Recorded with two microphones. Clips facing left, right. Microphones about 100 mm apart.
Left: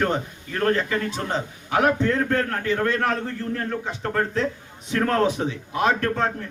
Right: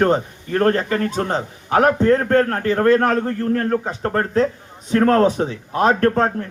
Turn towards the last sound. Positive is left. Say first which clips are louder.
# right 7 dB
turn(degrees=-40)  # may be behind; listen again after turning